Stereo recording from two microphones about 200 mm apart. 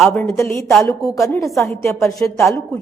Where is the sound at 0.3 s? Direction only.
15° left (ahead or behind).